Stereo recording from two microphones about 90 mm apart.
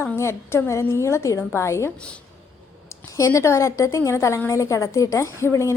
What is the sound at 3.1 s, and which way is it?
A woman's voice, 35° left (ahead or behind).